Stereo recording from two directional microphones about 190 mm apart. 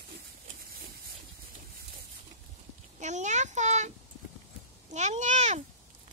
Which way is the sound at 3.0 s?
40° right (ahead or behind).